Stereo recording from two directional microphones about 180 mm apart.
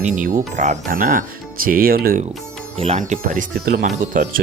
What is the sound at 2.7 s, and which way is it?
Speech, 35° right (ahead or behind).